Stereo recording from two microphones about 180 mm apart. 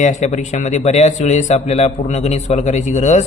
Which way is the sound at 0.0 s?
40° left (ahead or behind).